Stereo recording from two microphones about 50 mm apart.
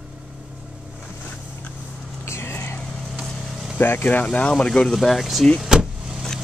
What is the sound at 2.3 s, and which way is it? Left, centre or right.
Vehicle, left.